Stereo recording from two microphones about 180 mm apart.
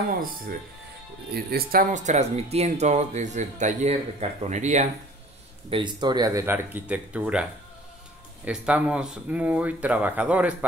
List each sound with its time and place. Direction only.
1.3 s speech: 60° right (ahead or behind); by 4.8 s 40° right (ahead or behind)
5.7 s speech: 25° right (ahead or behind); by 7.4 s 5° right (ahead or behind)
8.5 s speech: 5° right (ahead or behind)